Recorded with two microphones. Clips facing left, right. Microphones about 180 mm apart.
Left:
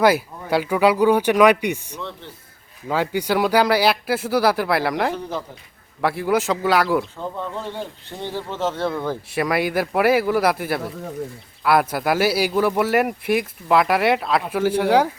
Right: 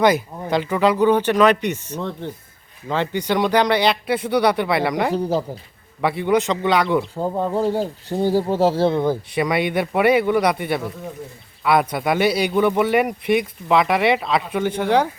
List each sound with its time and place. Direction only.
0.0 s speech: 5° left (ahead or behind)
2.0 s speech: 50° right (ahead or behind)
2.9 s speech: 5° left (ahead or behind)
5.1 s speech: 35° right (ahead or behind)
6.0 s speech: centre (ahead or behind)
7.2 s speech: 40° right (ahead or behind)
9.3 s speech: centre (ahead or behind)